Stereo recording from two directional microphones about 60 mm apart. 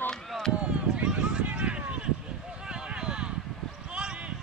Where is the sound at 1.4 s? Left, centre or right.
Centre.